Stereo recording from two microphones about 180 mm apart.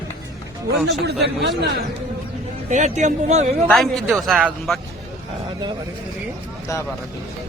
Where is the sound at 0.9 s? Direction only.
70° right (ahead or behind).